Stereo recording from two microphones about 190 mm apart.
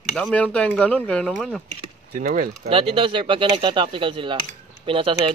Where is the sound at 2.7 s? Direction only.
30° right (ahead or behind).